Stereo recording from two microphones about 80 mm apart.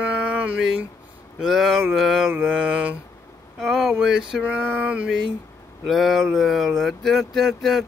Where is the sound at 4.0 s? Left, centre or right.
Centre.